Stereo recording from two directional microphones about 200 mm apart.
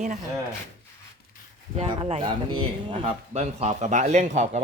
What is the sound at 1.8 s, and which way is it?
Speech, 30° right (ahead or behind).